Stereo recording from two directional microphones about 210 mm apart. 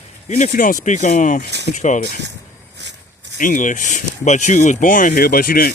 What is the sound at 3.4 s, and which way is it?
Speech, 40° left (ahead or behind).